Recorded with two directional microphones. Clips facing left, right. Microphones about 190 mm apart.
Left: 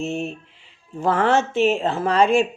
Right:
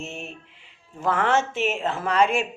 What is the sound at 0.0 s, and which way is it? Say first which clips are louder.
Speech: left 10 dB; 35° left (ahead or behind).